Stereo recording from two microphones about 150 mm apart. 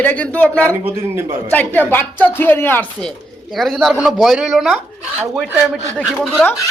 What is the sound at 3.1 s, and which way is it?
A man's voice, centre (ahead or behind).